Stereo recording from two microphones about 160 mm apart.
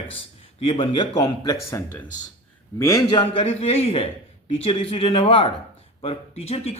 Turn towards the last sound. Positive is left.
turn(degrees=40)  # may be behind; listen again after turning